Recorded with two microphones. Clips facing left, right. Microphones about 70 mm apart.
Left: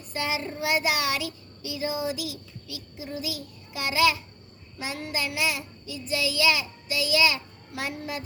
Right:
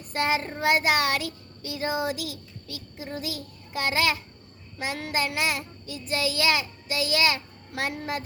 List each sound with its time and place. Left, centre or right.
0.1 s child singing: right